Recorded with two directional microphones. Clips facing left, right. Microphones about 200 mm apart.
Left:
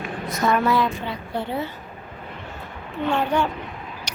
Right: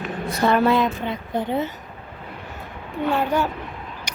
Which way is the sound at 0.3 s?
30° right (ahead or behind).